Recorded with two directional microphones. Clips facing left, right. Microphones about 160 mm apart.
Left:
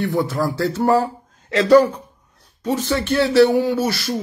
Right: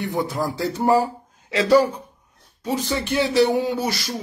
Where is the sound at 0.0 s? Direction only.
20° right (ahead or behind).